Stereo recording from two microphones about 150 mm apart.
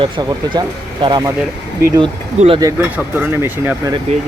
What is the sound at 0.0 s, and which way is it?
Speech, 30° right (ahead or behind).